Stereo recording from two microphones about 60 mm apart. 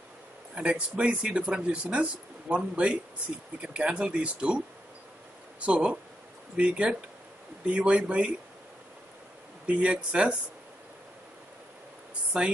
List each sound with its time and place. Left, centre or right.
0.6 s speech: centre
5.7 s speech: centre
9.7 s speech: centre
12.3 s speech: centre